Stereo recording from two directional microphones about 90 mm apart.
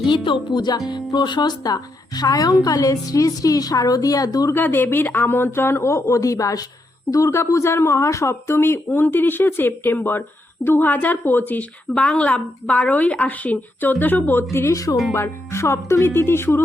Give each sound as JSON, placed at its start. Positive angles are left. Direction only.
{"t": 0.1, "sound": "a woman's voice", "side_deg": 60}
{"t": 4.5, "sound": "speech", "side_deg": 20}
{"t": 14.5, "sound": "a woman's voice", "side_deg": 30}